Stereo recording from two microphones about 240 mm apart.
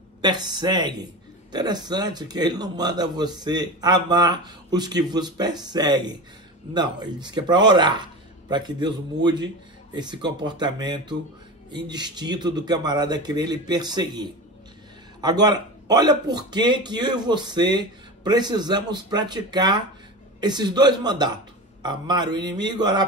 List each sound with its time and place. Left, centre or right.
0.2 s a man's voice: centre